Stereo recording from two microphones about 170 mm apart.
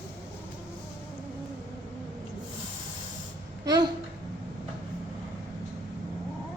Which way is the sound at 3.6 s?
25° right (ahead or behind).